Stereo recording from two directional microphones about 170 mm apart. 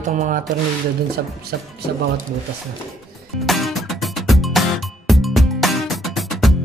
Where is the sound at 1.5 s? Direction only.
70° right (ahead or behind).